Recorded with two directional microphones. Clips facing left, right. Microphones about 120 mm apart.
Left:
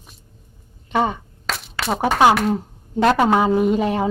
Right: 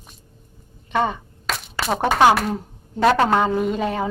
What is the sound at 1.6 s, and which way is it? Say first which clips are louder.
A woman's voice: even; centre (ahead or behind).